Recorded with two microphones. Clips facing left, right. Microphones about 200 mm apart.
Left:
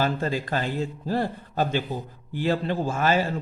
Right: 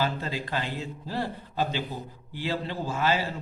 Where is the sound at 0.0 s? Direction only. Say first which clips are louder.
Left 4 dB; 50° left (ahead or behind).